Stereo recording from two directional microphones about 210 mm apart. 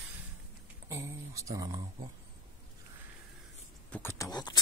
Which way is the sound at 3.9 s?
10° left (ahead or behind).